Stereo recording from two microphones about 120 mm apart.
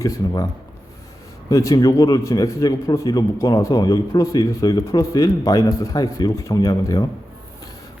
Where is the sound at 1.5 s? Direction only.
30° left (ahead or behind).